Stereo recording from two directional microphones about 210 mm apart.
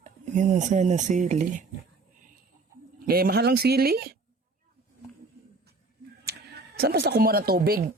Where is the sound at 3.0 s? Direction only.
45° right (ahead or behind).